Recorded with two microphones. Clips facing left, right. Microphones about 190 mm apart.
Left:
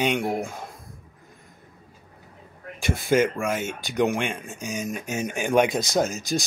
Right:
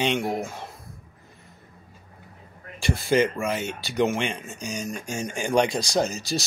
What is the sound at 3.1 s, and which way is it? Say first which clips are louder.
Speech: left 1 dB; centre (ahead or behind).